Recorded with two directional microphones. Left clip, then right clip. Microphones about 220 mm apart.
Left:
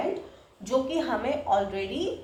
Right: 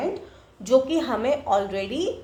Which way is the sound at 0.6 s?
50° right (ahead or behind).